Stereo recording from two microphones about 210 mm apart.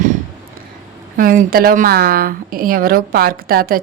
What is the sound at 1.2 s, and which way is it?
A woman's voice, 45° right (ahead or behind).